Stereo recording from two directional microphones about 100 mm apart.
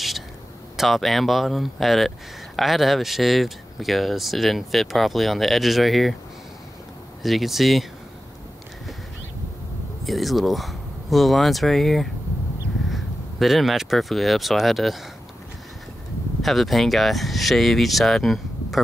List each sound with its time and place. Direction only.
0.7 s speech: centre (ahead or behind)
7.2 s speech: centre (ahead or behind)
10.0 s speech: centre (ahead or behind)
16.4 s speech: centre (ahead or behind)